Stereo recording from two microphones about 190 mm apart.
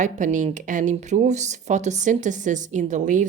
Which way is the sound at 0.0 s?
40° right (ahead or behind).